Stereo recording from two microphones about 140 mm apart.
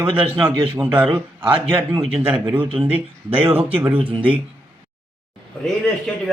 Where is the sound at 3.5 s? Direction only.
40° right (ahead or behind).